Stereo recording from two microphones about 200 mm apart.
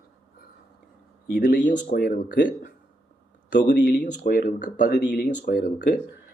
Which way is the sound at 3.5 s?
40° left (ahead or behind).